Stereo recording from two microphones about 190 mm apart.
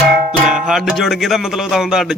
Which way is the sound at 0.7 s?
Centre (ahead or behind).